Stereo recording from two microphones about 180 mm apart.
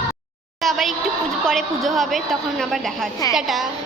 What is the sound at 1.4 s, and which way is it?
A woman's voice, centre (ahead or behind).